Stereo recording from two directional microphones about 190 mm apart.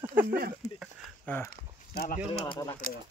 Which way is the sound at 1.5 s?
50° left (ahead or behind).